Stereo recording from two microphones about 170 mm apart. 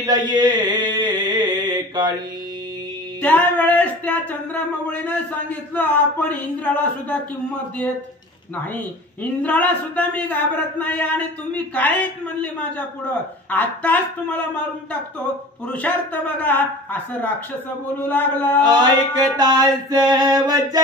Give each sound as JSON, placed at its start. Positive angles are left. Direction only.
{"t": 0.0, "sound": "music", "side_deg": -25}
{"t": 3.2, "sound": "music", "side_deg": 10}
{"t": 4.8, "sound": "speech", "side_deg": 10}
{"t": 9.2, "sound": "speech", "side_deg": 10}
{"t": 18.6, "sound": "a sound", "side_deg": -25}